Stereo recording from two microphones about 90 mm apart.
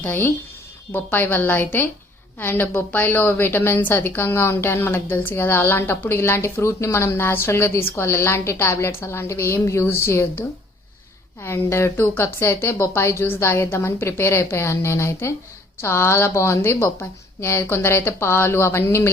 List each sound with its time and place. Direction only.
0.0 s a woman's voice: 20° left (ahead or behind)
11.4 s a woman's voice: 30° left (ahead or behind)